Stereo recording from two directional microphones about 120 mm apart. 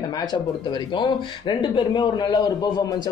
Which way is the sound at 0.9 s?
40° left (ahead or behind).